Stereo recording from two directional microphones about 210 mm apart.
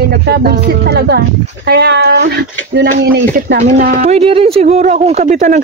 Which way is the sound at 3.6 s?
30° right (ahead or behind).